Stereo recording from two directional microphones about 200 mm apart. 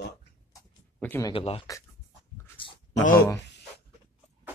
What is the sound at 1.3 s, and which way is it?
Speech, 30° left (ahead or behind).